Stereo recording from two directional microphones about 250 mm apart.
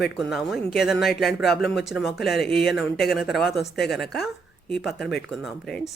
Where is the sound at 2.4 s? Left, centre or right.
Left.